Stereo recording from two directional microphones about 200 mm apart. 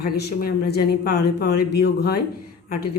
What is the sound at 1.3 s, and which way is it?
Speech, 55° left (ahead or behind).